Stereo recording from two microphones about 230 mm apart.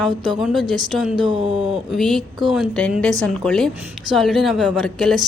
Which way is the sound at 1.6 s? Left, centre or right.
Centre.